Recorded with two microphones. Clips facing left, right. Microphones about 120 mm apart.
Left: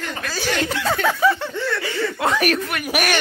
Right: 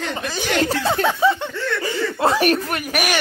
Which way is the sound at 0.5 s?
35° right (ahead or behind).